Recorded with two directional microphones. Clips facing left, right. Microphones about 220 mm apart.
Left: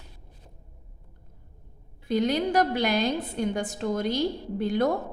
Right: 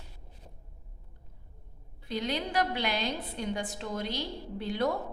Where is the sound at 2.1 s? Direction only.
45° left (ahead or behind).